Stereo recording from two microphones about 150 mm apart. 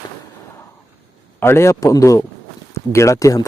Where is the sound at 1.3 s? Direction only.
15° left (ahead or behind).